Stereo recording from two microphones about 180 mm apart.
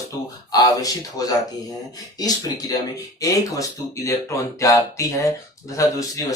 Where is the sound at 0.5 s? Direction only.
20° left (ahead or behind).